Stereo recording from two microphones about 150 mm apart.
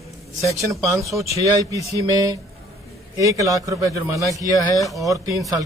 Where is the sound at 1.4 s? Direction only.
20° right (ahead or behind).